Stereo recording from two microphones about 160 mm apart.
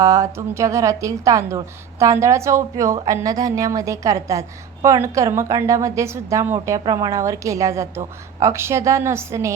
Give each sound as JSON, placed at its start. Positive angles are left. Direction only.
{"t": 0.0, "sound": "a woman's voice", "side_deg": -20}